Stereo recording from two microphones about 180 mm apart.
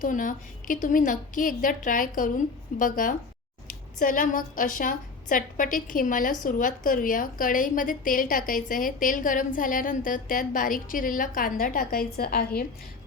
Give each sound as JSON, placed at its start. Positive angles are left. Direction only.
{"t": 0.0, "sound": "a woman's voice", "side_deg": 50}